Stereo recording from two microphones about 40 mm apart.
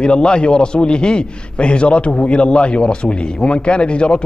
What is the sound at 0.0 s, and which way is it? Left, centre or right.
A man's voice, left.